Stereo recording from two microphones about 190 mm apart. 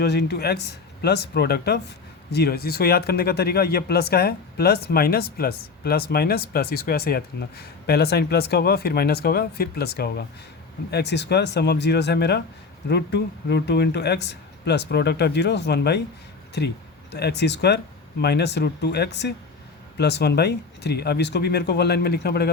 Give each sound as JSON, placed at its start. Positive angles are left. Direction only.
{"t": 0.0, "sound": "speech", "side_deg": 60}